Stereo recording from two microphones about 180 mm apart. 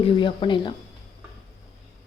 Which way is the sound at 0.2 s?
25° left (ahead or behind).